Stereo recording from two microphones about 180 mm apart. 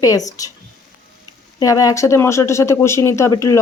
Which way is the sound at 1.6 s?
20° left (ahead or behind).